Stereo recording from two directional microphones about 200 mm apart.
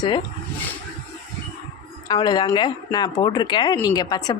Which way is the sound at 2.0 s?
20° left (ahead or behind).